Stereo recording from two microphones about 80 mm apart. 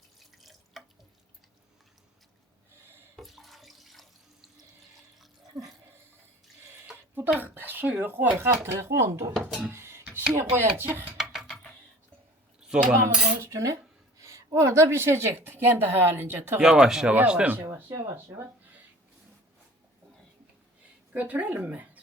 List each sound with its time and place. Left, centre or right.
0.2 s drip: centre
3.2 s water tap: centre
7.3 s speech: right
8.6 s cutlery: right
9.7 s a sound: right
10.3 s cutlery: right
10.8 s speech: right
11.2 s a sound: centre
12.5 s cutlery: centre
13.0 s cutlery: right
14.2 s a woman's voice: right
16.6 s speech: centre
17.7 s cutlery: right
21.1 s speech: right